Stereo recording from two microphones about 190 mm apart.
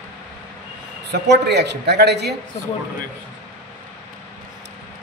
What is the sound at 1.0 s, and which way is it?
A man's voice, 60° right (ahead or behind).